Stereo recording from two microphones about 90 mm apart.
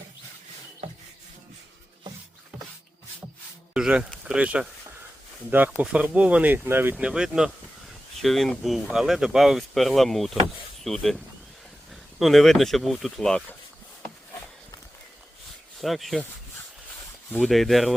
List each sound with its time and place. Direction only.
3.8 s speech: 10° right (ahead or behind)
6.9 s speech: 5° right (ahead or behind)
12.2 s speech: centre (ahead or behind)
15.8 s speech: centre (ahead or behind)
17.4 s speech: centre (ahead or behind)